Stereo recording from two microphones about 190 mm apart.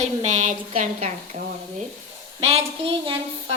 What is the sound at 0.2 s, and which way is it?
A woman's voice, 40° right (ahead or behind).